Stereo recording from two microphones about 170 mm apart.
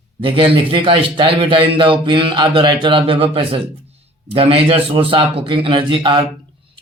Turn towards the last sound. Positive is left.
turn(degrees=-30)  # may be behind; listen again after turning